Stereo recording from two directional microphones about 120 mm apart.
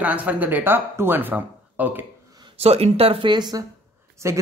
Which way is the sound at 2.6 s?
60° right (ahead or behind).